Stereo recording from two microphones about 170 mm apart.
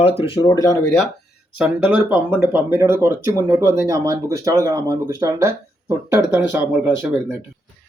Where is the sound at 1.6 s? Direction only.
5° right (ahead or behind).